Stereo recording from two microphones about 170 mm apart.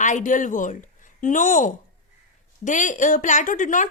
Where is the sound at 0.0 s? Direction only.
50° left (ahead or behind).